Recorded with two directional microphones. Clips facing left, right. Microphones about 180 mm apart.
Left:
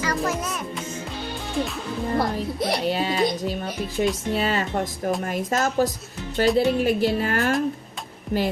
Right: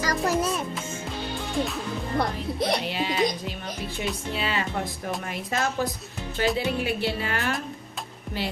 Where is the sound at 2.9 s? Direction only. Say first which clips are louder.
Left 3 dB; 40° left (ahead or behind).